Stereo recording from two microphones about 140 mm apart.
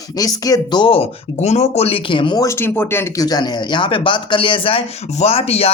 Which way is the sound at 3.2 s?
30° left (ahead or behind).